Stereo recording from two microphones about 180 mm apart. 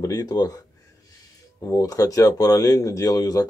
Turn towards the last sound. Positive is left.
turn(degrees=20)  # may be behind; listen again after turning